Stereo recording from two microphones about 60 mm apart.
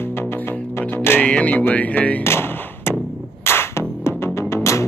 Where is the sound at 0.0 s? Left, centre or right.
Left.